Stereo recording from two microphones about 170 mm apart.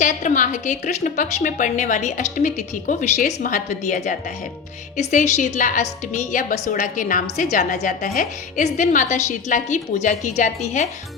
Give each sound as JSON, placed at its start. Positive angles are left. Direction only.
{"t": 0.0, "sound": "a woman's voice", "side_deg": 50}